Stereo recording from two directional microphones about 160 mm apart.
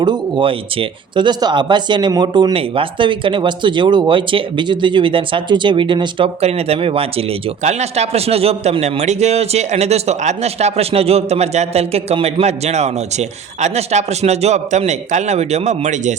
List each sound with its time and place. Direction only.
0.0 s speech: 30° right (ahead or behind); by 16.1 s 45° right (ahead or behind)